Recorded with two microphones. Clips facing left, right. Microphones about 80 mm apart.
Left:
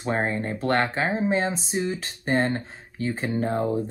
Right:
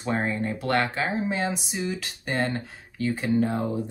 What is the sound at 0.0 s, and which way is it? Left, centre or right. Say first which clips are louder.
Speech: left 1 dB; left.